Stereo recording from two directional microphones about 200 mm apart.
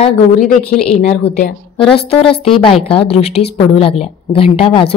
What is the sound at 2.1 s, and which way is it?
A woman's voice, 30° left (ahead or behind).